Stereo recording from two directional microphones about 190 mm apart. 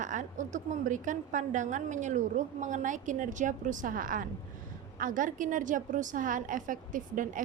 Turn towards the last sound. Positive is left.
turn(degrees=-45)  # may be behind; listen again after turning